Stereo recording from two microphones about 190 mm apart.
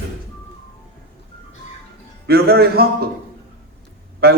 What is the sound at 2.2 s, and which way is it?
Speech, 55° right (ahead or behind).